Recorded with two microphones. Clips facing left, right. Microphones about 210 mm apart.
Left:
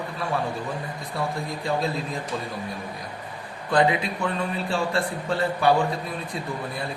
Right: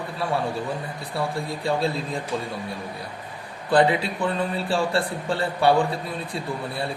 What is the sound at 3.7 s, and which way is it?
A man's voice, 30° right (ahead or behind).